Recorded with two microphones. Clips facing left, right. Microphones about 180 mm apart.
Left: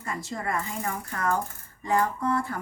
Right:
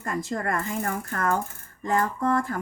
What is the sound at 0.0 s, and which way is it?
Speech, 50° right (ahead or behind).